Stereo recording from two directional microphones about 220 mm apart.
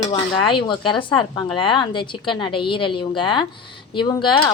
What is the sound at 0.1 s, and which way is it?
Speech, 20° left (ahead or behind).